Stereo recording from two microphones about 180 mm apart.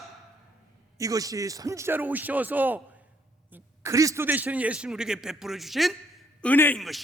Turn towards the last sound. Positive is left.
turn(degrees=0)  # may be behind; listen again after turning